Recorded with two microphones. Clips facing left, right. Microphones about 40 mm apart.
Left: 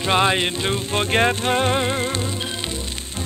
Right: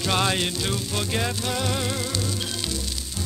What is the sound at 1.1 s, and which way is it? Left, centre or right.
Music, left.